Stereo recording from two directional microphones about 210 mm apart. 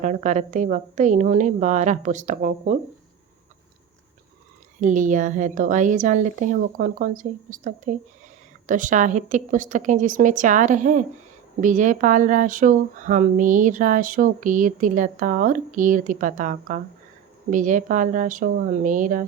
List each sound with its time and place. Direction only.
0.0 s speech: 35° right (ahead or behind)
4.8 s speech: 35° right (ahead or behind)